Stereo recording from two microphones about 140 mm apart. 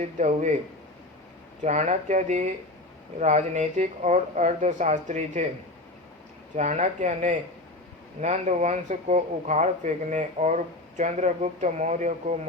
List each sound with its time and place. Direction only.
0.0 s speech: 60° right (ahead or behind)
1.6 s speech: 55° right (ahead or behind)
6.6 s speech: 55° right (ahead or behind)